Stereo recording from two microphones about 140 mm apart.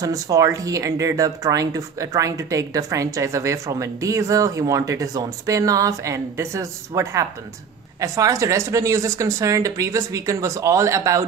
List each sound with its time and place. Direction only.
0.0 s speech: 25° right (ahead or behind)